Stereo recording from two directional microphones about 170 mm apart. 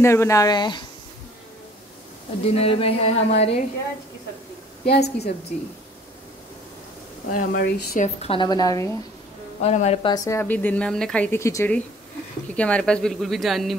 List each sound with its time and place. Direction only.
0.0 s a woman's voice: 15° left (ahead or behind)
2.4 s speech: 35° left (ahead or behind)
4.8 s a woman's voice: 70° left (ahead or behind)
7.3 s speech: 65° left (ahead or behind)
8.0 s a woman's voice: 35° left (ahead or behind)
9.6 s speech: 40° left (ahead or behind)
10.1 s speech: 20° left (ahead or behind); by 13.7 s centre (ahead or behind)